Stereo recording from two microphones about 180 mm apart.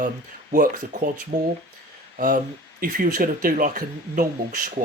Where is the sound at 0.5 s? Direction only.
45° right (ahead or behind).